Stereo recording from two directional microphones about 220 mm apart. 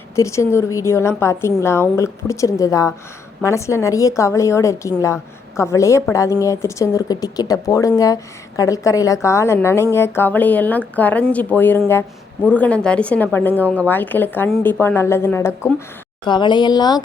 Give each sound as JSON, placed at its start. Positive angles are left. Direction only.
{"t": 0.2, "sound": "speech", "side_deg": 15}